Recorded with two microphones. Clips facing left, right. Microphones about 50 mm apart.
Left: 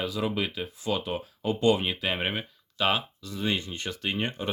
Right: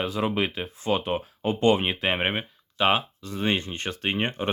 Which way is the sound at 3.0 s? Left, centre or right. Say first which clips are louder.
Right 3 dB; right.